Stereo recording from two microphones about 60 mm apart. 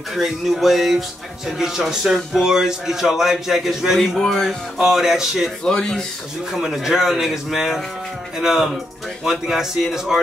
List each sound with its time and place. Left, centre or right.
0.1 s a man's voice: centre
4.2 s speech: centre
4.5 s a man's voice: centre
5.6 s speech: centre
6.5 s a man's voice: centre